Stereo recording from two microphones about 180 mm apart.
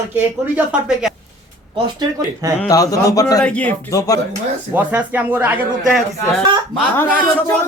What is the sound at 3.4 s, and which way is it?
Speech, 5° left (ahead or behind).